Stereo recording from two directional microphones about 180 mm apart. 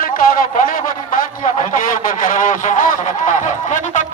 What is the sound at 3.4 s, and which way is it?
Speech, 45° left (ahead or behind).